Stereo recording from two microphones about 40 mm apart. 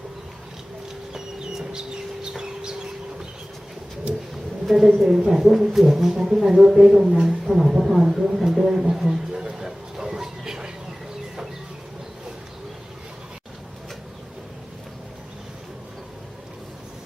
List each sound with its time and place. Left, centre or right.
1.1 s chicken: centre
4.6 s speech: centre
7.3 s speech: centre
8.4 s a sound: centre